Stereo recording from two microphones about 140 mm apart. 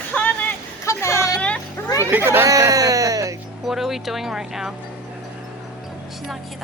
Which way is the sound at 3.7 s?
Centre (ahead or behind).